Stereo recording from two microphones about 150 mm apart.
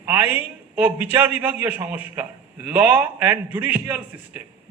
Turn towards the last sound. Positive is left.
turn(degrees=-10)  # may be behind; listen again after turning